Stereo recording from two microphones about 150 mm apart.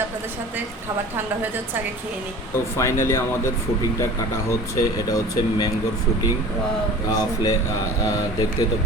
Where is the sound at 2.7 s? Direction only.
20° left (ahead or behind).